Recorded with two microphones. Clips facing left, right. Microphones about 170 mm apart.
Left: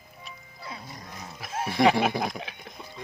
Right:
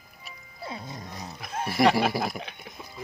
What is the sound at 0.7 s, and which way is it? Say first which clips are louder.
Music: right 3 dB; 20° right (ahead or behind).